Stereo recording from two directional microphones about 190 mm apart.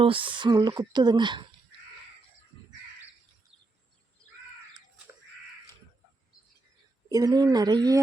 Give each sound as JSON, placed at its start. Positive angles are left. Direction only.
{"t": 0.0, "sound": "speech", "side_deg": -25}
{"t": 7.1, "sound": "speech", "side_deg": -20}